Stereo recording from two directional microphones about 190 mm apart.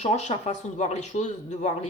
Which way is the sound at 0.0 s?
35° left (ahead or behind).